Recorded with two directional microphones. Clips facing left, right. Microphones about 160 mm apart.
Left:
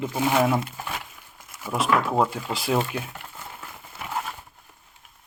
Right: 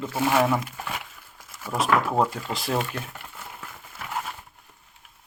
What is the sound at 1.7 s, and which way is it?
Speech, centre (ahead or behind).